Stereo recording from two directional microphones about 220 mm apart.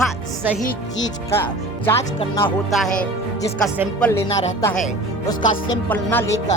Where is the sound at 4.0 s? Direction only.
10° left (ahead or behind).